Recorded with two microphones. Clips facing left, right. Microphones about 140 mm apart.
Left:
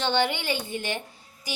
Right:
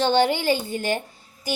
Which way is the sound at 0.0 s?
35° right (ahead or behind).